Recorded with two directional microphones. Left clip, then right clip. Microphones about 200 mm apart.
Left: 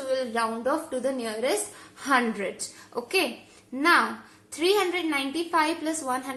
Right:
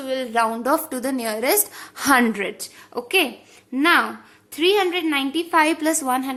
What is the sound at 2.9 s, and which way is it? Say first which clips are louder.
A woman's voice: right 6 dB; 40° right (ahead or behind).